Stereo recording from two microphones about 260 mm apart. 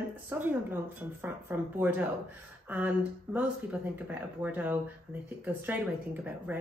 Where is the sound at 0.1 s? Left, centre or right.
Centre.